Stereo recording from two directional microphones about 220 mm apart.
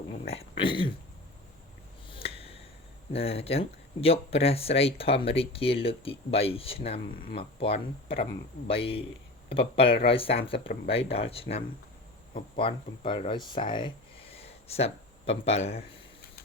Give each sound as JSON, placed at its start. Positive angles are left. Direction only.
{"t": 0.1, "sound": "speech", "side_deg": 30}
{"t": 2.0, "sound": "finger snapping", "side_deg": 25}
{"t": 3.1, "sound": "speech", "side_deg": 25}